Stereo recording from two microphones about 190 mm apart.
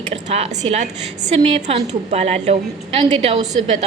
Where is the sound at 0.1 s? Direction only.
35° right (ahead or behind).